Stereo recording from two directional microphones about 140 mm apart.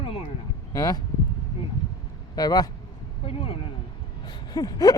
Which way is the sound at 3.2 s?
40° left (ahead or behind).